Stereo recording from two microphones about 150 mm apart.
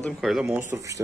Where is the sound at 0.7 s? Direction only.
20° right (ahead or behind).